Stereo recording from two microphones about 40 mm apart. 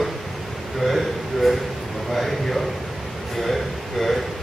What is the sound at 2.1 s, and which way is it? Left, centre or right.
A man's voice, centre.